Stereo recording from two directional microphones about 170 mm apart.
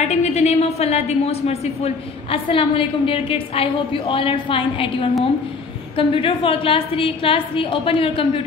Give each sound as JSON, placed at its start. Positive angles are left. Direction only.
{"t": 0.0, "sound": "a woman's voice", "side_deg": 40}